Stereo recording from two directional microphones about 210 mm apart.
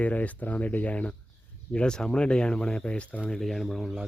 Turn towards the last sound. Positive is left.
turn(degrees=0)  # may be behind; listen again after turning